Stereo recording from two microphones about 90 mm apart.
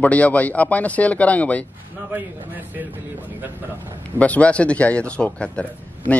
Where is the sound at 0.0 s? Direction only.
15° left (ahead or behind).